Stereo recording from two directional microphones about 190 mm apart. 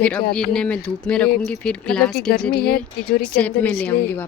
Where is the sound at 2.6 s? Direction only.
50° left (ahead or behind).